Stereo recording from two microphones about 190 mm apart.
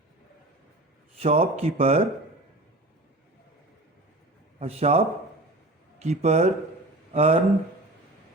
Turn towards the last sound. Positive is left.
turn(degrees=-30)  # may be behind; listen again after turning